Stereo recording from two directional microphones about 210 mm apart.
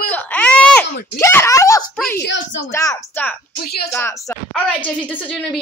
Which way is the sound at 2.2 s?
60° left (ahead or behind).